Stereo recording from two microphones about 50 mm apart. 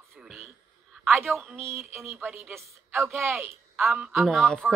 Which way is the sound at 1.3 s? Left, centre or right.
Right.